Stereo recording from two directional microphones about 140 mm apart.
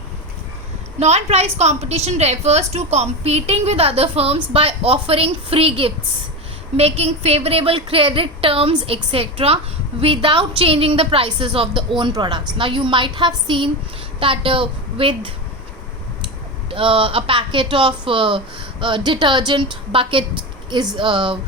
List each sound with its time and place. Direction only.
0.9 s a woman's voice: 50° right (ahead or behind)
16.7 s speech: 40° right (ahead or behind)